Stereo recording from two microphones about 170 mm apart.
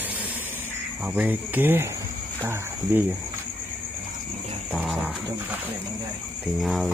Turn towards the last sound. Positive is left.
turn(degrees=0)  # may be behind; listen again after turning